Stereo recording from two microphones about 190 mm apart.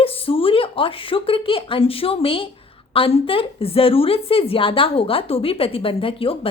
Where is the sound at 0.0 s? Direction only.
30° left (ahead or behind).